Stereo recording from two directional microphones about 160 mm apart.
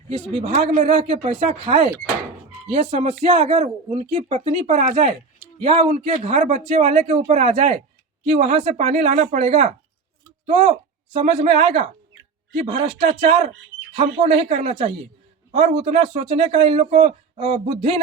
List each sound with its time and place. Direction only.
0.1 s a man's voice: 40° right (ahead or behind)
0.9 s a man's voice: 30° right (ahead or behind)